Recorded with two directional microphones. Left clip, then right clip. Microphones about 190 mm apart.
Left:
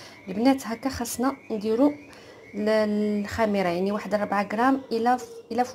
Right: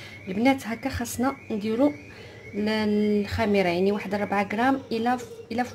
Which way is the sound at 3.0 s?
35° left (ahead or behind).